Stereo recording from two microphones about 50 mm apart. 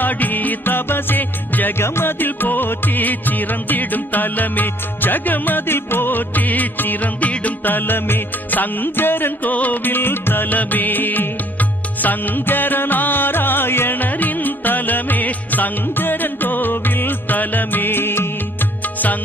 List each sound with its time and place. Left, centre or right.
0.0 s music: left
1.8 s music: left
9.5 s music: left